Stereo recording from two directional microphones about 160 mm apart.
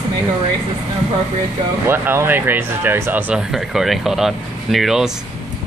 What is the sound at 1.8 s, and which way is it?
Speech, 15° right (ahead or behind).